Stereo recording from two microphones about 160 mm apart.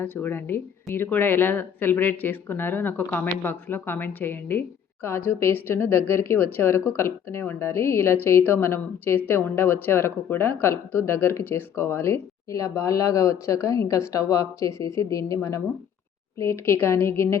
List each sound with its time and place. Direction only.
0.0 s speech: 10° left (ahead or behind)